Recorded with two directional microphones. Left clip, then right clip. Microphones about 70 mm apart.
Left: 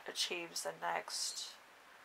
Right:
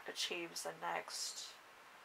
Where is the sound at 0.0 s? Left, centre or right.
Left.